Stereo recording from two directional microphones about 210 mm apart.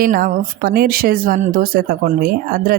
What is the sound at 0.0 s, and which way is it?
Speech, 40° right (ahead or behind).